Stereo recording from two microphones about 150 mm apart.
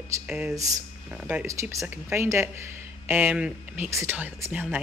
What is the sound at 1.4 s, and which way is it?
A woman's voice, 20° right (ahead or behind).